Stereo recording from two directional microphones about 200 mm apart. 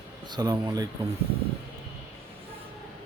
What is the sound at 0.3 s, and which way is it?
Speech, 20° right (ahead or behind).